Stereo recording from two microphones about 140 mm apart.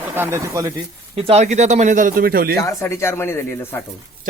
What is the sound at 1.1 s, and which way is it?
Speech, 45° right (ahead or behind).